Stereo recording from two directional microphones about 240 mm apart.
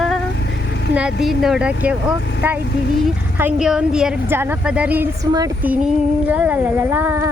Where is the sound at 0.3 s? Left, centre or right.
Left.